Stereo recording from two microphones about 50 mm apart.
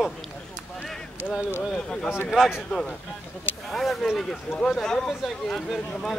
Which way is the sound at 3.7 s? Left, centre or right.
Centre.